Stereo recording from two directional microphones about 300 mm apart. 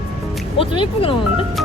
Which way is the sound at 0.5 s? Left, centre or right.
Centre.